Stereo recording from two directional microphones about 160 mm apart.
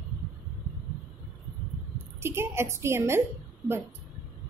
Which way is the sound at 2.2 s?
15° right (ahead or behind).